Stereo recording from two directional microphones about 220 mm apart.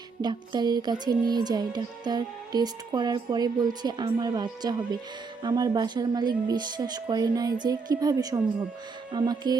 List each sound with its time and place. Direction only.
0.2 s music: 20° right (ahead or behind)